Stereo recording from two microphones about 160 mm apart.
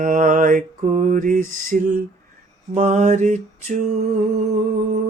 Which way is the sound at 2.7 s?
45° right (ahead or behind).